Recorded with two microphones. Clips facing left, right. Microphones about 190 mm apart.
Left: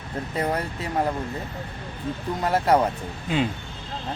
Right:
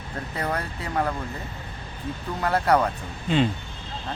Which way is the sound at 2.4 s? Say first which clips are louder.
Left 1 dB; 20° left (ahead or behind).